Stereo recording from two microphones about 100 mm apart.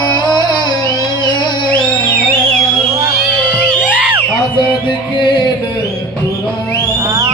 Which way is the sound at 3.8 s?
15° right (ahead or behind).